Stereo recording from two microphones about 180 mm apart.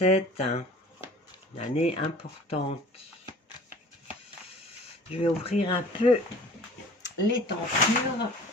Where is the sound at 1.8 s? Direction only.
35° left (ahead or behind).